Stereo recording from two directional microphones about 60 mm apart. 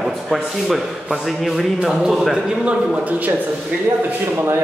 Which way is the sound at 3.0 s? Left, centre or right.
Right.